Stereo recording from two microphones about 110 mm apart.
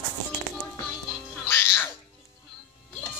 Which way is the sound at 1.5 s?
20° left (ahead or behind).